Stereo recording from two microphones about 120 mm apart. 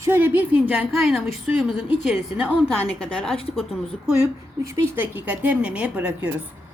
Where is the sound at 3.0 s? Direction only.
5° left (ahead or behind).